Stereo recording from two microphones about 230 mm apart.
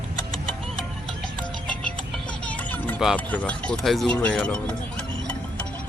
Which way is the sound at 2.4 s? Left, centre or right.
Centre.